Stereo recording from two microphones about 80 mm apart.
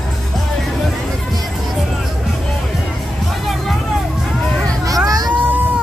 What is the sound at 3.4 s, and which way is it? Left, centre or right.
Music, centre.